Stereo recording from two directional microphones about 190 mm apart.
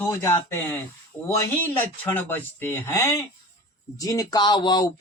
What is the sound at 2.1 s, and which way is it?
Speech, 10° left (ahead or behind).